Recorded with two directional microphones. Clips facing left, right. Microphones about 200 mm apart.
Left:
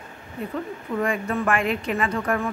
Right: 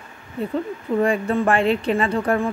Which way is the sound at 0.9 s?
30° right (ahead or behind).